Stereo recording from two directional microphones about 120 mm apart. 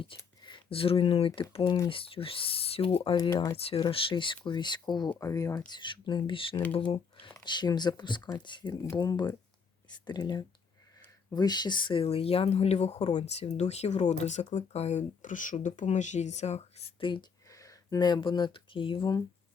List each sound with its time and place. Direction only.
0.0 s a sound: 45° left (ahead or behind)
1.6 s speech: 30° left (ahead or behind)
1.9 s speech: 50° left (ahead or behind); by 5.8 s 30° left (ahead or behind)
5.8 s speech: 40° left (ahead or behind)
8.7 s speech: 25° left (ahead or behind)
9.0 s speech: 35° left (ahead or behind); by 17.1 s 60° left (ahead or behind)
17.5 s speech: 30° left (ahead or behind); by 19.1 s 45° left (ahead or behind)